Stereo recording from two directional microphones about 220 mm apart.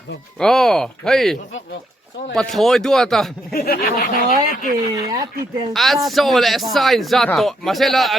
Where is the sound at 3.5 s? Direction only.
40° left (ahead or behind).